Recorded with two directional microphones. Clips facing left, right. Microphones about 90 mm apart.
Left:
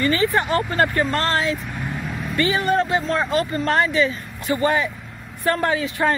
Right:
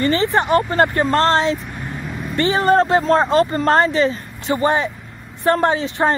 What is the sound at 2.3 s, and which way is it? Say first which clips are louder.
Speech: right 5 dB; 35° right (ahead or behind).